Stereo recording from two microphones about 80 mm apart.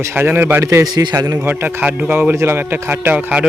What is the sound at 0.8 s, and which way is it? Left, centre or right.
Speech, right.